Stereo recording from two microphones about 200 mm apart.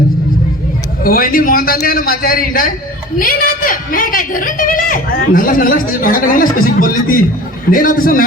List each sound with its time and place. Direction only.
1.0 s a woman's voice: 45° left (ahead or behind)